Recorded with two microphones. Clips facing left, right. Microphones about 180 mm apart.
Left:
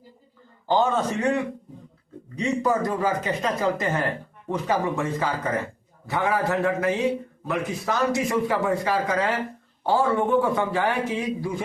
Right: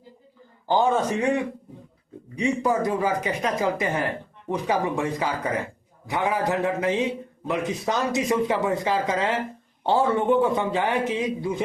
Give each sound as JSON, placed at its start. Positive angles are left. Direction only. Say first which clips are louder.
{"t": 0.7, "sound": "a man's voice", "louder": "right 1 dB", "side_deg": -10}